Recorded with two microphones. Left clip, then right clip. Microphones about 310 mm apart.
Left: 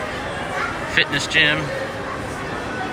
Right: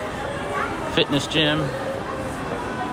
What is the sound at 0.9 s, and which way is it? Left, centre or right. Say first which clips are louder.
Speech: left 4 dB; centre.